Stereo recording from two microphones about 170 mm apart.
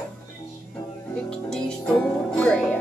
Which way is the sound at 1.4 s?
5° left (ahead or behind).